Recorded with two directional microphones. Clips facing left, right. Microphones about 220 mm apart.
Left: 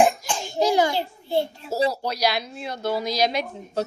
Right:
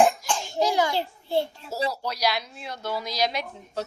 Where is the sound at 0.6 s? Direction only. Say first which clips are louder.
Left 4 dB; 30° left (ahead or behind).